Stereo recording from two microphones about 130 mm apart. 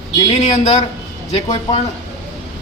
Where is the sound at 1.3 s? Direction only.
55° left (ahead or behind).